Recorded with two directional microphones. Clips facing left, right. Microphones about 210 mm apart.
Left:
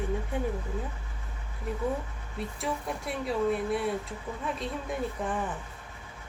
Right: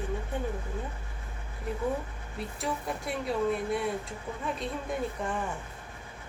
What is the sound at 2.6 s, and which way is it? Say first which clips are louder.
Speech: even; centre (ahead or behind).